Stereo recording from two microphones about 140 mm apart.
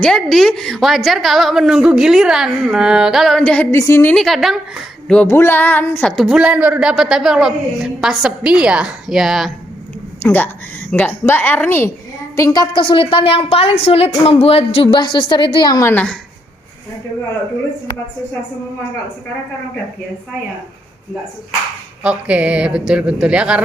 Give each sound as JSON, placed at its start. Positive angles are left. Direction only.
{"t": 0.0, "sound": "speech", "side_deg": 5}
{"t": 3.8, "sound": "a woman's voice", "side_deg": 20}
{"t": 4.1, "sound": "speech", "side_deg": 0}
{"t": 10.2, "sound": "a woman's voice", "side_deg": 15}
{"t": 12.5, "sound": "a woman's voice", "side_deg": 35}
{"t": 15.8, "sound": "a woman's voice", "side_deg": 15}
{"t": 22.0, "sound": "a sound", "side_deg": -10}